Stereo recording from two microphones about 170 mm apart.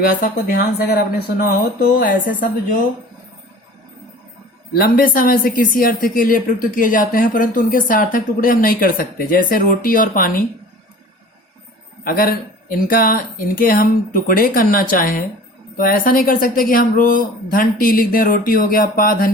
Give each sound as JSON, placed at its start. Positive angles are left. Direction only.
{"t": 0.0, "sound": "speech", "side_deg": 60}
{"t": 4.8, "sound": "speech", "side_deg": 55}
{"t": 12.0, "sound": "speech", "side_deg": 60}